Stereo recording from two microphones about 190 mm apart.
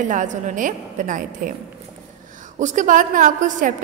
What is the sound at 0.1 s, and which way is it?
A woman's voice, 40° right (ahead or behind).